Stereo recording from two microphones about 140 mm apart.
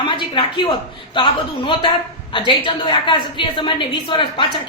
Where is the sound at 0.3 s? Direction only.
35° left (ahead or behind).